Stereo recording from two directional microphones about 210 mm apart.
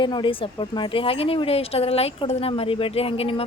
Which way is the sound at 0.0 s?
25° left (ahead or behind).